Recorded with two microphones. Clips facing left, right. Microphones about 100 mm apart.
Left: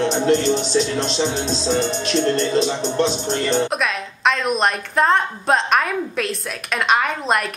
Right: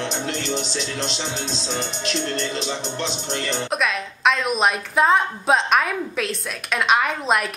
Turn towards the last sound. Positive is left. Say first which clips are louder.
# left 2 dB
turn(degrees=0)  # may be behind; listen again after turning